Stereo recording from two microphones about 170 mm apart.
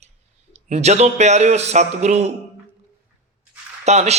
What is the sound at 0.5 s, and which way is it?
A man's voice, 40° right (ahead or behind).